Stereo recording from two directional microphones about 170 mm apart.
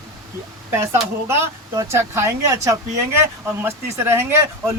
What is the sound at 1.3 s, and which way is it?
Speech, 15° right (ahead or behind).